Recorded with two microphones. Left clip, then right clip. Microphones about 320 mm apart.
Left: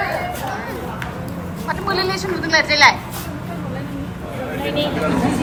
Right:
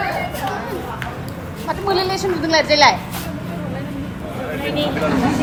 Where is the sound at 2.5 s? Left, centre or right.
Centre.